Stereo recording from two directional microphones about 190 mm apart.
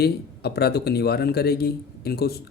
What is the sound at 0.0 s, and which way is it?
Speech, 60° left (ahead or behind).